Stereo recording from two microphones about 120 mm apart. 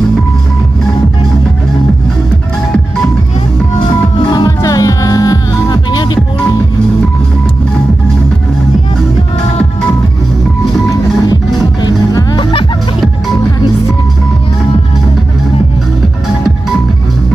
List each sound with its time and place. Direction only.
4.2 s music: 40° left (ahead or behind)
11.8 s music: 35° left (ahead or behind)